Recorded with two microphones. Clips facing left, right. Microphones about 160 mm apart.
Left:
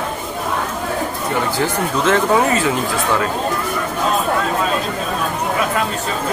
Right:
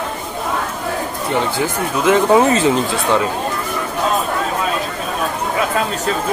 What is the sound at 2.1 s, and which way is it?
Speech, 25° right (ahead or behind).